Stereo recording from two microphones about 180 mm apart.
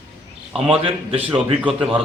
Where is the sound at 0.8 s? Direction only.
30° right (ahead or behind).